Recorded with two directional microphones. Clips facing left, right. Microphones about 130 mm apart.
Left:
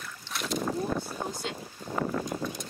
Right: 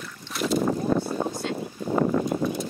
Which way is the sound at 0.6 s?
55° right (ahead or behind).